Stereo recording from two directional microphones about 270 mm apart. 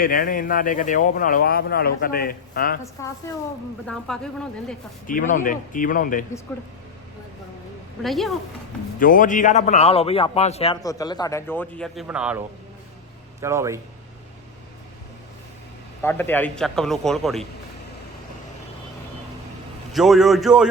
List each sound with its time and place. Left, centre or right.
0.0 s a man's voice: left
3.8 s a man's voice: centre
5.0 s a man's voice: left
8.0 s a man's voice: centre
9.0 s a man's voice: left; by 12.4 s centre
13.4 s speech: centre
16.0 s a man's voice: centre
19.9 s a man's voice: centre